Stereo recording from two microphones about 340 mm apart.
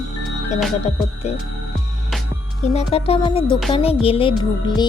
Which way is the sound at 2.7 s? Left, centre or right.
Centre.